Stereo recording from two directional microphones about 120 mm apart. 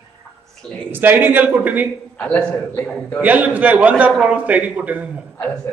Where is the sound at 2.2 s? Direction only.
15° left (ahead or behind).